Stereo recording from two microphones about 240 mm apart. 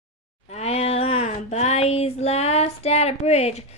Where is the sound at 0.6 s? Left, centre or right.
Left.